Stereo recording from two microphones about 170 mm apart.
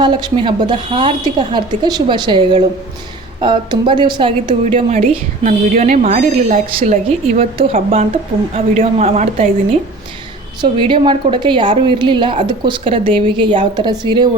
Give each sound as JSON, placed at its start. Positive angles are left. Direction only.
{"t": 0.0, "sound": "speech", "side_deg": -25}
{"t": 5.4, "sound": "a woman's voice", "side_deg": -45}
{"t": 7.6, "sound": "speech", "side_deg": -35}
{"t": 10.6, "sound": "speech", "side_deg": -25}